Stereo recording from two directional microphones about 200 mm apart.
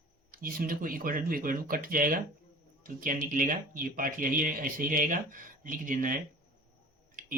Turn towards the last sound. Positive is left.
turn(degrees=-45)  # may be behind; listen again after turning